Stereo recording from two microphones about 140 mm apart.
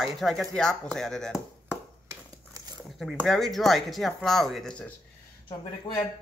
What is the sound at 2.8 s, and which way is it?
Speech, centre (ahead or behind).